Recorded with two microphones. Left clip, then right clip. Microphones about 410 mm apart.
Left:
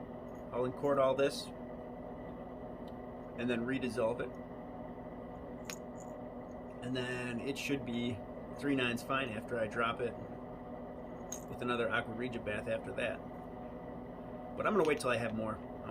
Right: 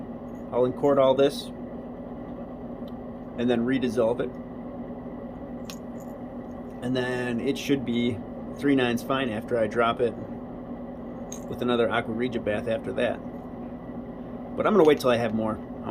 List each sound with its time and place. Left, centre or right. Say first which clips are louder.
0.9 s speech: right 10 dB; centre
3.3 s speech: right 11 dB; centre
6.9 s speech: right 11 dB; centre
11.6 s speech: right 10 dB; centre
14.6 s speech: right 12 dB; centre